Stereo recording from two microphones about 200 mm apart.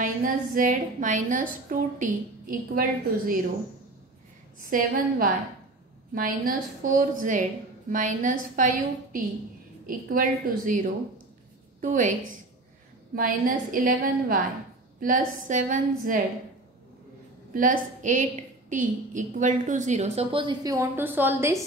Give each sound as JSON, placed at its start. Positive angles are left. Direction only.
{"t": 0.0, "sound": "a woman's voice", "side_deg": -45}
{"t": 4.6, "sound": "a woman's voice", "side_deg": -45}
{"t": 17.5, "sound": "a woman's voice", "side_deg": -40}